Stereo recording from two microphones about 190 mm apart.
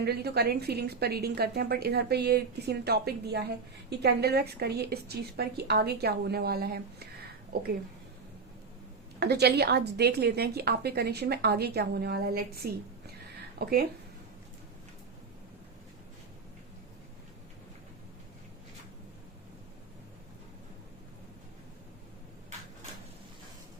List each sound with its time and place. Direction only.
0.0 s a woman's voice: 60° right (ahead or behind)
9.2 s a woman's voice: 60° right (ahead or behind)